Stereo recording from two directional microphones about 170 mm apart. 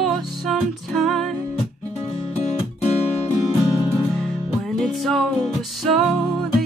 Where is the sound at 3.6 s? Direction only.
20° left (ahead or behind).